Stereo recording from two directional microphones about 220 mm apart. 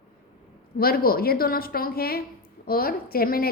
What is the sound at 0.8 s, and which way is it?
A woman's voice, 45° left (ahead or behind).